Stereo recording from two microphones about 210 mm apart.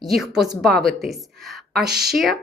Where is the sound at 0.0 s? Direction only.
Centre (ahead or behind).